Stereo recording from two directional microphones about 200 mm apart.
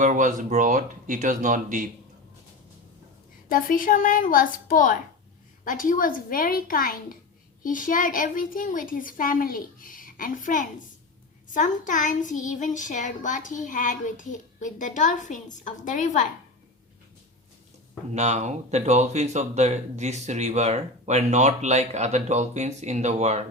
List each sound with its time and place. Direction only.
0.0 s speech: 40° right (ahead or behind)
3.5 s a woman's voice: 45° left (ahead or behind)
11.5 s child singing: 40° left (ahead or behind)
18.1 s speech: 35° right (ahead or behind)